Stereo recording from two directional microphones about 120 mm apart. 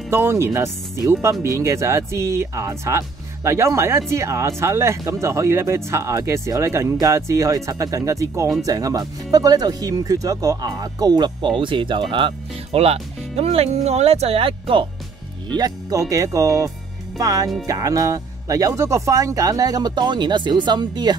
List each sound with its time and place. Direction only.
0.1 s speech: 20° right (ahead or behind); by 12.4 s 45° right (ahead or behind)
12.7 s speech: 60° right (ahead or behind)
15.5 s speech: 30° right (ahead or behind)